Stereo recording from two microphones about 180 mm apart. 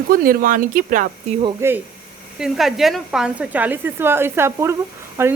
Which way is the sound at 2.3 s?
Centre (ahead or behind).